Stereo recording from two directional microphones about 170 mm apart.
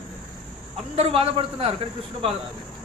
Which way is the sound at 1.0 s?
35° right (ahead or behind).